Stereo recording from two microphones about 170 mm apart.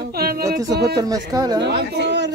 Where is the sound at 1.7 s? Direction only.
85° right.